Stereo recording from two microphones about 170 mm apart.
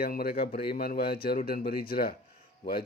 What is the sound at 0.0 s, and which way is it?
A man's voice, 60° left (ahead or behind).